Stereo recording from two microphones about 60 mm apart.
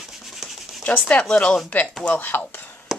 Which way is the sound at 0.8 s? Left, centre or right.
Left.